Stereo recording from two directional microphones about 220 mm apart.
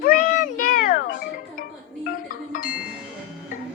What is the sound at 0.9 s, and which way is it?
Music, 50° left (ahead or behind).